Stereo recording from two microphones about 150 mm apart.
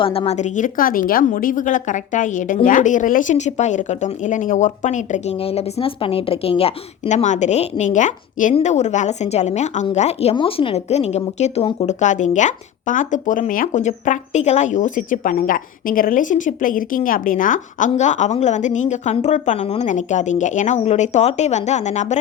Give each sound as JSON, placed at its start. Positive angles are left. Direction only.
{"t": 0.0, "sound": "a woman's voice", "side_deg": 40}
{"t": 5.4, "sound": "a woman's voice", "side_deg": 40}